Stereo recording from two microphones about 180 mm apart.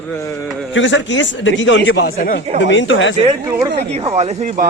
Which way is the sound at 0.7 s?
90° left.